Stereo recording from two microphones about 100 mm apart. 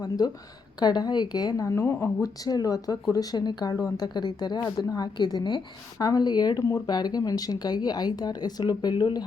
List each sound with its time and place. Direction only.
0.8 s speech: 45° left (ahead or behind); by 2.3 s 25° left (ahead or behind)
2.4 s speech: 40° left (ahead or behind)